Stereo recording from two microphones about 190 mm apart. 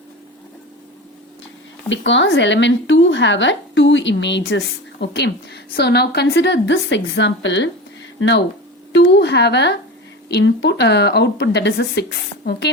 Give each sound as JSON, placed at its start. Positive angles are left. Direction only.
{"t": 1.9, "sound": "speech", "side_deg": 75}
{"t": 8.9, "sound": "a woman's voice", "side_deg": 70}